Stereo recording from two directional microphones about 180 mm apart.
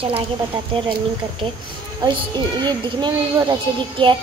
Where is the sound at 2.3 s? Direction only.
25° right (ahead or behind).